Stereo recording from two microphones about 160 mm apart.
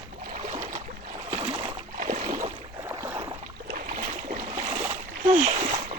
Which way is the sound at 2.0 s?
50° right (ahead or behind).